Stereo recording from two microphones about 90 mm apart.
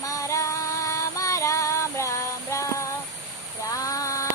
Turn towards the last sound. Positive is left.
turn(degrees=40)  # may be behind; listen again after turning